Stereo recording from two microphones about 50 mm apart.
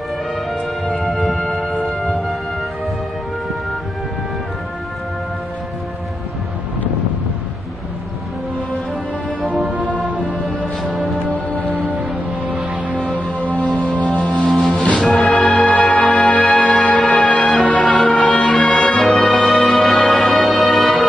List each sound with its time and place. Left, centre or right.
0.5 s music: centre
10.8 s music: centre
12.4 s music: right
13.4 s music: left
14.5 s music: centre
15.1 s music: centre
16.1 s music: centre
17.5 s music: centre
17.7 s music: centre